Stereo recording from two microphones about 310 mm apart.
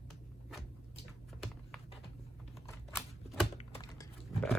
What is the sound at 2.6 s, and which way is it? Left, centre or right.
Typewriter, centre.